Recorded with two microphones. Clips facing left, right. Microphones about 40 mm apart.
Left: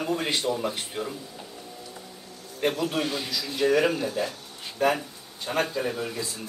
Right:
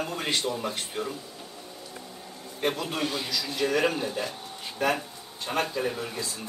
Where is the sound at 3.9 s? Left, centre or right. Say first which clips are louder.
Left 2 dB; centre.